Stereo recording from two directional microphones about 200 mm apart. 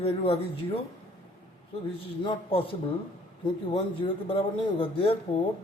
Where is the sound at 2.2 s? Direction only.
25° left (ahead or behind).